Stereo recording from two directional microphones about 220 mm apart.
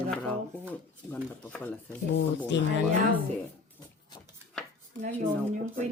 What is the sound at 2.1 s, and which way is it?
Speech, 50° left (ahead or behind).